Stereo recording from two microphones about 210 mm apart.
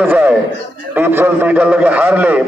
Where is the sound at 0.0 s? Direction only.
10° right (ahead or behind).